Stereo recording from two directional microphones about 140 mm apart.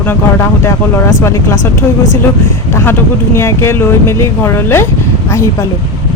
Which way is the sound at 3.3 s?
20° left (ahead or behind).